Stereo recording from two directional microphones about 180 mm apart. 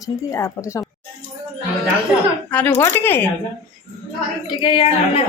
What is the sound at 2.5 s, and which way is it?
Speech, 10° left (ahead or behind).